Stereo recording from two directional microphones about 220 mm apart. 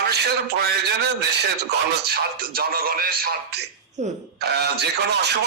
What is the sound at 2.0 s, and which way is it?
Speech, 45° right (ahead or behind).